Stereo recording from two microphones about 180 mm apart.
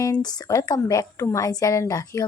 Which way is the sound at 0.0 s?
20° left (ahead or behind).